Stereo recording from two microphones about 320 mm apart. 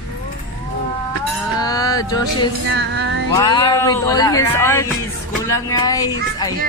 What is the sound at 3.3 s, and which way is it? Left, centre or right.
Speech, centre.